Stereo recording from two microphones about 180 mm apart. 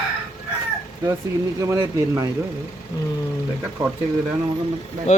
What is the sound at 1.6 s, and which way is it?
Speech, 20° right (ahead or behind).